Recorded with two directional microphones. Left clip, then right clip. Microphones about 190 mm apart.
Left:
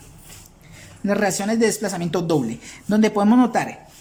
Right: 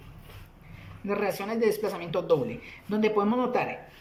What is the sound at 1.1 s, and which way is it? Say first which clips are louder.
A woman's voice: left 8 dB; 65° left (ahead or behind).